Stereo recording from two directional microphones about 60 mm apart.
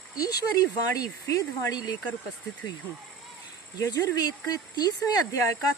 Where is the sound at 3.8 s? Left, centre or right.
Left.